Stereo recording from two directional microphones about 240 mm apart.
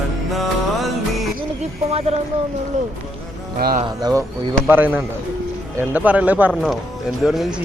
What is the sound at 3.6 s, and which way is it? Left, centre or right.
Speech, right.